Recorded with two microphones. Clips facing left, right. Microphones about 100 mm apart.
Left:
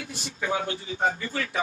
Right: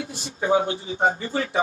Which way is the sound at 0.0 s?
30° right (ahead or behind).